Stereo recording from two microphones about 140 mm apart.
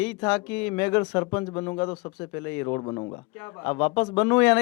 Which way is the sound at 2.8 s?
30° left (ahead or behind).